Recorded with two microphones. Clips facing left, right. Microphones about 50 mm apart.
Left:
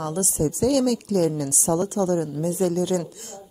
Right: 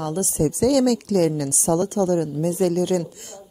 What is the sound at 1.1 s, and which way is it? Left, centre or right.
Speech, right.